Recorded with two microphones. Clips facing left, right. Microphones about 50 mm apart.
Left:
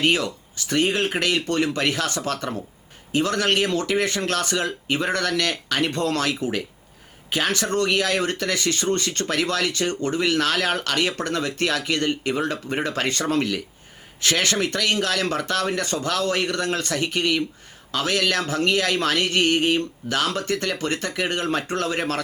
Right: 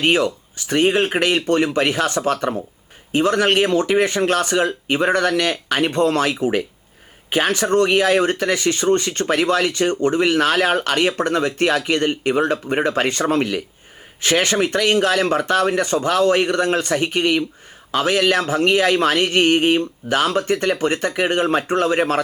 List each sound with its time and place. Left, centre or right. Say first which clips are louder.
0.0 s speech: right 4 dB; right